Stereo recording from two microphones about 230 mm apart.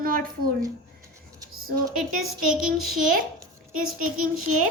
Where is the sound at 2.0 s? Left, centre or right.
Centre.